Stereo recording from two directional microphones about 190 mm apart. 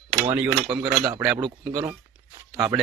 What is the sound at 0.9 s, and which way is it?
Speech, 20° right (ahead or behind).